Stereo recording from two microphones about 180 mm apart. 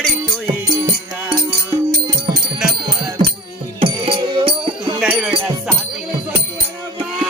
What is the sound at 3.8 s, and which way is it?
Music, 30° right (ahead or behind).